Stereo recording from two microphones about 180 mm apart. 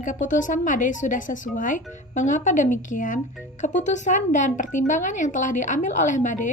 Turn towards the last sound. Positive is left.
turn(degrees=45)  # may be behind; listen again after turning